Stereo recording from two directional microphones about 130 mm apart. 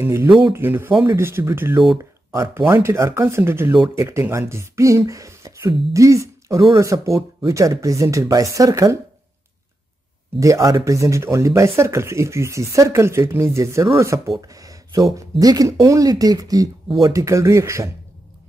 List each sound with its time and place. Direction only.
0.0 s speech: 20° right (ahead or behind)
10.4 s speech: 25° right (ahead or behind)
14.4 s a sound: 25° right (ahead or behind)
15.1 s speech: 25° right (ahead or behind)